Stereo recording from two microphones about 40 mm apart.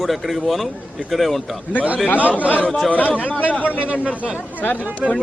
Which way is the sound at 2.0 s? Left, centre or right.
Left.